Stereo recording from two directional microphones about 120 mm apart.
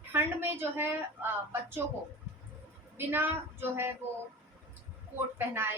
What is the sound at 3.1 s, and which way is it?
Speech, 20° right (ahead or behind).